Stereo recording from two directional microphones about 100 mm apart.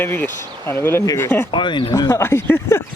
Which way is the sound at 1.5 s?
50° left (ahead or behind).